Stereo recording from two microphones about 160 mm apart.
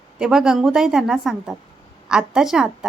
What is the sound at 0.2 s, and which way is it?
A woman's voice, 5° right (ahead or behind).